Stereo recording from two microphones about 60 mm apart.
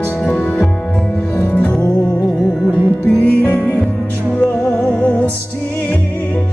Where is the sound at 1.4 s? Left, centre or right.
Left.